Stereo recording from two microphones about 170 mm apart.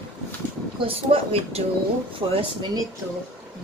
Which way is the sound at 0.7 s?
35° right (ahead or behind).